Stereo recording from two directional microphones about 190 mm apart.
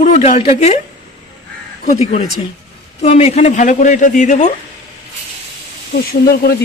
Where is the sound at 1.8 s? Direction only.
35° left (ahead or behind).